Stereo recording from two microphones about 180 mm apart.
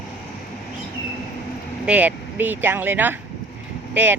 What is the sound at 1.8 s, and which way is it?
Speech, 10° right (ahead or behind).